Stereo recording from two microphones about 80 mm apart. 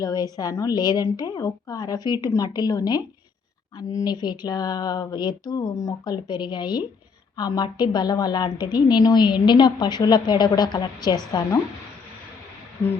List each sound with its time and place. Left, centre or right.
0.0 s a woman's voice: left
6.2 s a woman's voice: left